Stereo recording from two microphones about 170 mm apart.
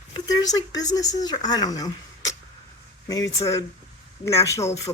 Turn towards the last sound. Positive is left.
turn(degrees=20)  # may be behind; listen again after turning